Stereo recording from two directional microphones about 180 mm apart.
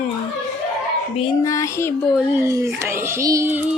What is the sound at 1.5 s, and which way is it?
Child singing, 15° left (ahead or behind).